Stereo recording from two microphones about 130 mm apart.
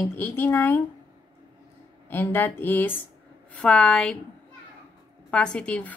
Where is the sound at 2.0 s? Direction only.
15° left (ahead or behind).